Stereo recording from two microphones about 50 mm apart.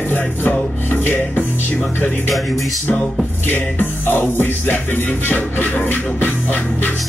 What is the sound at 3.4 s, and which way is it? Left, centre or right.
Music, left.